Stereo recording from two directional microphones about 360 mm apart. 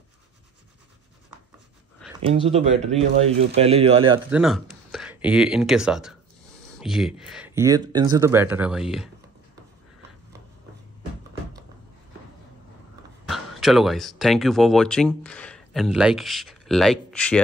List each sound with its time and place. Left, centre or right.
2.2 s speech: centre
4.3 s speech: centre
13.2 s speech: centre